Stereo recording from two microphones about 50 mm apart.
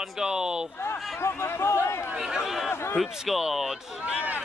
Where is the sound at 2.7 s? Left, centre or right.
Left.